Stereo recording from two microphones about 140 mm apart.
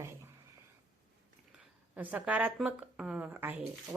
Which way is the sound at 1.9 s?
10° right (ahead or behind).